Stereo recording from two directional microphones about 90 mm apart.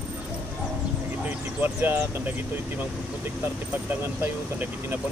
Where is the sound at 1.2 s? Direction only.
20° right (ahead or behind).